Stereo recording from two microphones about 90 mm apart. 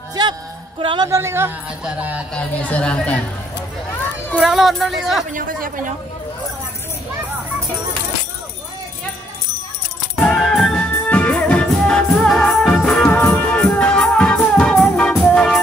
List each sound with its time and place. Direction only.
0.1 s music: 45° right (ahead or behind)
0.7 s speech: 65° right (ahead or behind)
1.0 s speech: 30° right (ahead or behind)
2.0 s a sound: 15° right (ahead or behind)
2.3 s a woman's voice: 10° left (ahead or behind)
4.4 s speech: 5° right (ahead or behind)
10.1 s music: 5° left (ahead or behind)
11.1 s music: 15° left (ahead or behind)
13.5 s music: 15° left (ahead or behind)